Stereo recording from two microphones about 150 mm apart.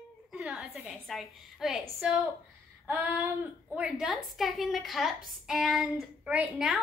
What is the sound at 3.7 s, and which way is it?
A woman's voice, 5° right (ahead or behind).